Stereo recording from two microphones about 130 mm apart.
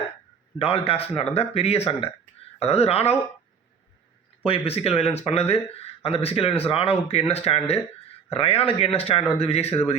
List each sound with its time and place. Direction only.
0.6 s speech: 50° left (ahead or behind)
4.4 s speech: 45° left (ahead or behind)